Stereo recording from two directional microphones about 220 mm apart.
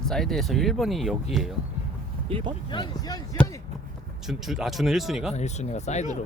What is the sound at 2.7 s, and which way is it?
Speech, 20° left (ahead or behind).